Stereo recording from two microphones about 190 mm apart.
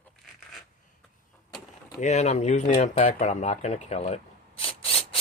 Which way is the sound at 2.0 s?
35° left (ahead or behind).